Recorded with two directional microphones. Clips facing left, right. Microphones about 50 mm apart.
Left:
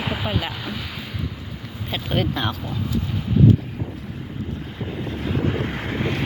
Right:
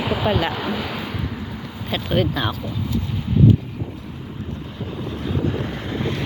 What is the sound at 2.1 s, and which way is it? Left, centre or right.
Speech, left.